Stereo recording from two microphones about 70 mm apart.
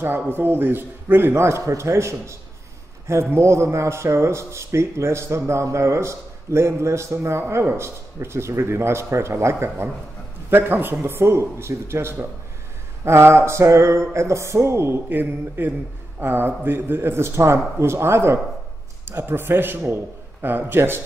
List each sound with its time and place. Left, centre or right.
0.3 s speech: right
15.0 s speech: right